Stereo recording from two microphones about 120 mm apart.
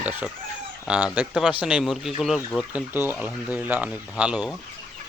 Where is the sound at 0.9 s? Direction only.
5° right (ahead or behind).